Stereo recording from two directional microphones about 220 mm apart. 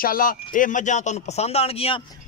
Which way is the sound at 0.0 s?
40° left (ahead or behind).